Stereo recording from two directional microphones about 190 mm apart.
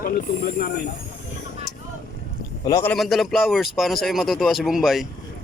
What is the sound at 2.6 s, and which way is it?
Speech, 15° left (ahead or behind).